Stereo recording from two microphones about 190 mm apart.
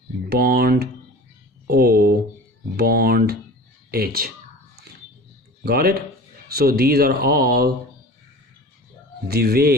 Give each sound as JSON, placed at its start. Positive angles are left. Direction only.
{"t": 0.3, "sound": "speech", "side_deg": -55}
{"t": 1.6, "sound": "a sound", "side_deg": -55}
{"t": 3.9, "sound": "speech", "side_deg": -50}
{"t": 5.6, "sound": "speech", "side_deg": -55}
{"t": 9.3, "sound": "speech", "side_deg": -55}